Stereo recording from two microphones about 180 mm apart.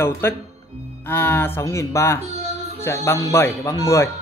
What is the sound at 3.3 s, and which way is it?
Speech, 15° left (ahead or behind).